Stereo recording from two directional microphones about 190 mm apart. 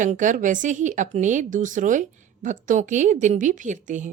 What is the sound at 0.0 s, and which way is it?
A woman's voice, 40° right (ahead or behind).